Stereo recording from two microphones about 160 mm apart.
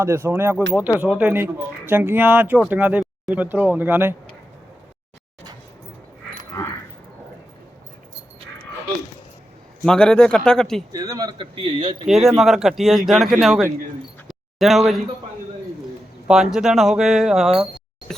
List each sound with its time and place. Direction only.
0.0 s speech: 15° right (ahead or behind)
9.8 s speech: 5° left (ahead or behind)
10.9 s speech: 25° right (ahead or behind)
12.0 s speech: centre (ahead or behind)
14.3 s a sound: centre (ahead or behind)
16.3 s speech: 5° right (ahead or behind)
18.1 s a sound: 5° left (ahead or behind)